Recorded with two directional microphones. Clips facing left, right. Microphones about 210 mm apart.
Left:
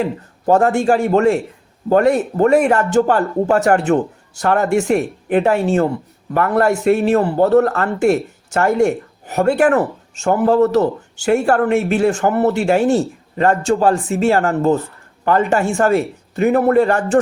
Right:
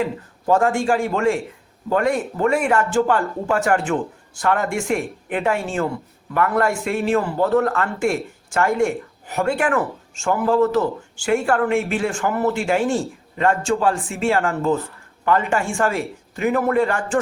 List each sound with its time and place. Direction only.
0.0 s speech: 35° left (ahead or behind)